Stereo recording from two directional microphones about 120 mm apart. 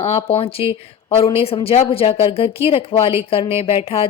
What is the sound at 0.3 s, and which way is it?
A woman's voice, 50° left (ahead or behind).